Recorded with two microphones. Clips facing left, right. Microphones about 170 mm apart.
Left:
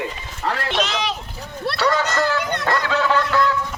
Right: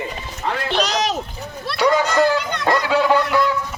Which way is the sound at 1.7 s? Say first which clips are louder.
Right 4 dB; 10° right (ahead or behind).